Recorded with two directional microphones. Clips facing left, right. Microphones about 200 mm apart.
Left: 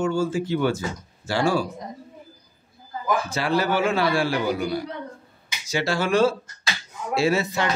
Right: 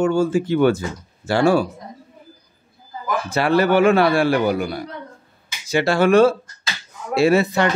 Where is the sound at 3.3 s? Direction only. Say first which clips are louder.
Right 10 dB; 60° right (ahead or behind).